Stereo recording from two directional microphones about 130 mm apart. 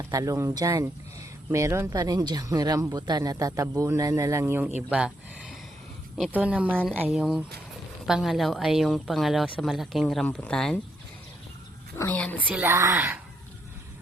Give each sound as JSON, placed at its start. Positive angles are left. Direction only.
{"t": 0.0, "sound": "speech", "side_deg": -25}
{"t": 4.9, "sound": "a woman's voice", "side_deg": -5}
{"t": 11.9, "sound": "a woman's voice", "side_deg": 10}
{"t": 12.5, "sound": "a woman's voice", "side_deg": -15}